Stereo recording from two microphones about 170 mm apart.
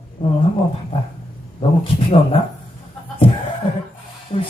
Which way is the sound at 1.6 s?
35° left (ahead or behind).